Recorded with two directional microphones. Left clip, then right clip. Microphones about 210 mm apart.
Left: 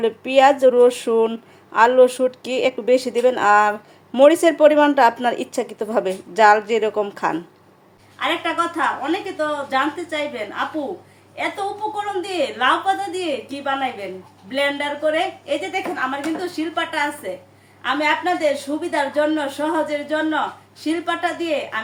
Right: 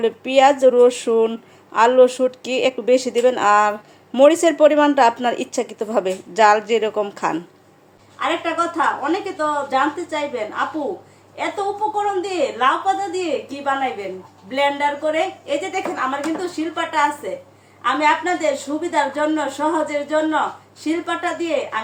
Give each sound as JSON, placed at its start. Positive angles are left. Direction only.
{"t": 0.0, "sound": "speech", "side_deg": 0}
{"t": 8.2, "sound": "a woman's voice", "side_deg": 15}